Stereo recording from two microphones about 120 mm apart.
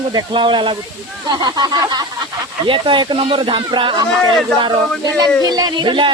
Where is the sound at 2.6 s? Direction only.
45° right (ahead or behind).